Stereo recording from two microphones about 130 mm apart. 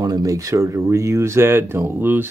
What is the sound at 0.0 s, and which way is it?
Speech, 30° right (ahead or behind).